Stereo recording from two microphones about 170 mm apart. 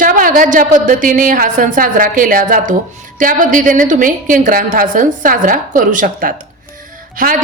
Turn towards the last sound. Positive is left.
turn(degrees=-55)  # may be behind; listen again after turning